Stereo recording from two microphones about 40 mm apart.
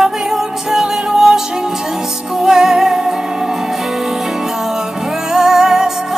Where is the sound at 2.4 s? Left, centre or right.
Centre.